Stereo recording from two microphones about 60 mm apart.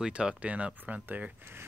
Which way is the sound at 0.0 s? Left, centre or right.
Centre.